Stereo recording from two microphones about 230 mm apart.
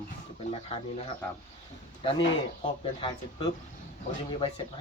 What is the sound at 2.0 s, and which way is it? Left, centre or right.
Speech, left.